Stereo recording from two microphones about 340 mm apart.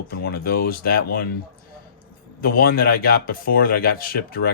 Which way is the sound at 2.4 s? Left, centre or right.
Left.